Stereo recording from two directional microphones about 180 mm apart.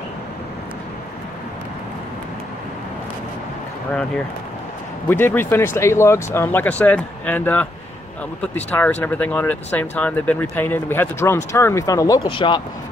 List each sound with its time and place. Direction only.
5.0 s speech: 10° left (ahead or behind); by 12.6 s 25° left (ahead or behind)